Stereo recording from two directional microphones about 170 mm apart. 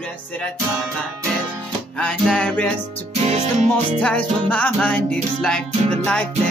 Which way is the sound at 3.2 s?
40° right (ahead or behind).